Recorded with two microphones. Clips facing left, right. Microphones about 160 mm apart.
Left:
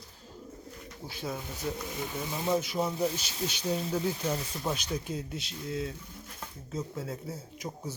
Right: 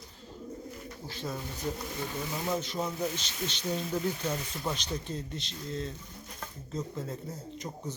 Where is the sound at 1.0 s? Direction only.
10° left (ahead or behind).